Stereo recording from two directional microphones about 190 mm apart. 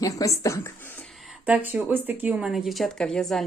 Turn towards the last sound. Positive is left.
turn(degrees=0)  # may be behind; listen again after turning